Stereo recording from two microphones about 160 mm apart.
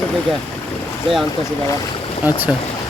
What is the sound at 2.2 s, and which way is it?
Speech, 10° right (ahead or behind).